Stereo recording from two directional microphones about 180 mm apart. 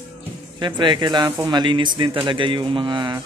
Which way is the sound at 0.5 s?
25° right (ahead or behind).